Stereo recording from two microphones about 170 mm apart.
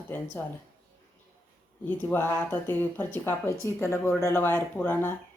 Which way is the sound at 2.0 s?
10° left (ahead or behind).